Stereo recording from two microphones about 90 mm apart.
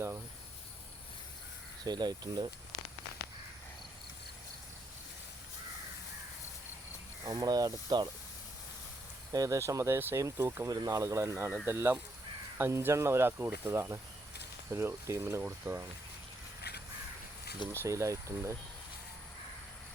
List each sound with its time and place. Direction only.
1.8 s speech: 50° right (ahead or behind)
7.3 s speech: 45° right (ahead or behind)
9.3 s speech: 40° right (ahead or behind)
10.7 s speech: 45° right (ahead or behind); by 15.8 s 25° right (ahead or behind)
17.7 s speech: 35° right (ahead or behind)